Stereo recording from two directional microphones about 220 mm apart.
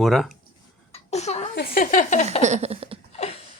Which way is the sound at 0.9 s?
30° left (ahead or behind).